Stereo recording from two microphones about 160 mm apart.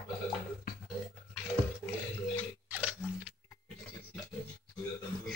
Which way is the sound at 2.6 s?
10° right (ahead or behind).